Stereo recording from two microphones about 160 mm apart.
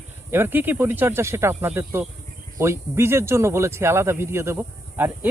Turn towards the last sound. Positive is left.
turn(degrees=-10)  # may be behind; listen again after turning